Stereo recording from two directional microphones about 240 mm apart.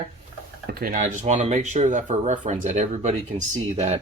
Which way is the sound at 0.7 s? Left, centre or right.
Right.